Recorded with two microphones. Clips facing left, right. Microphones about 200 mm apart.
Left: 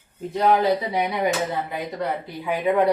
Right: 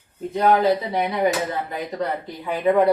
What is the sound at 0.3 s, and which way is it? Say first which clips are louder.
Speech: right 1 dB; centre (ahead or behind).